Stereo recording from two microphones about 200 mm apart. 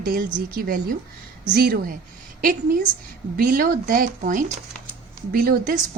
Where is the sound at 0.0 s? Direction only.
45° right (ahead or behind).